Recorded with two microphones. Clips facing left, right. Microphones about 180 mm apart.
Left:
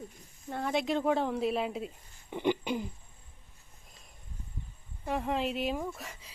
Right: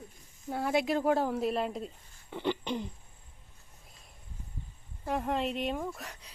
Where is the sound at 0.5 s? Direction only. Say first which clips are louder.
Right 1 dB; 5° right (ahead or behind).